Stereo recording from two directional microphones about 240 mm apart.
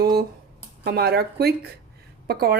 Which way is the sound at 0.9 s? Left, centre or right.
Right.